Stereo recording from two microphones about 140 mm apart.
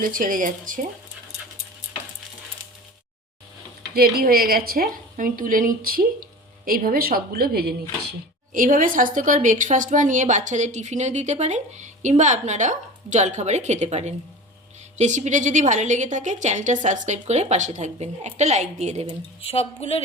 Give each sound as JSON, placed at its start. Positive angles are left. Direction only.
{"t": 0.0, "sound": "speech", "side_deg": -75}
{"t": 3.9, "sound": "a woman's voice", "side_deg": -90}
{"t": 8.5, "sound": "a woman's voice", "side_deg": -75}
{"t": 19.4, "sound": "speech", "side_deg": 45}